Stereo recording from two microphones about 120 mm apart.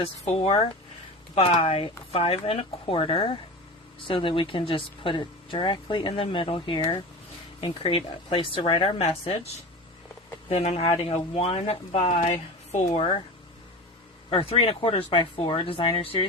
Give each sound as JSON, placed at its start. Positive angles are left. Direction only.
{"t": 0.0, "sound": "speech", "side_deg": 55}
{"t": 10.5, "sound": "speech", "side_deg": 60}
{"t": 14.3, "sound": "speech", "side_deg": 50}